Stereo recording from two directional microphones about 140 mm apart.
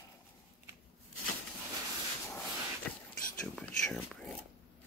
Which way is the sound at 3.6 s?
5° left (ahead or behind).